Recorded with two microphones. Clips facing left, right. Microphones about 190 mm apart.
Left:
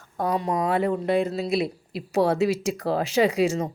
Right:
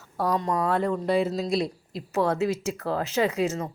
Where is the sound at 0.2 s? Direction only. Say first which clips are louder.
Left 1 dB; 10° left (ahead or behind).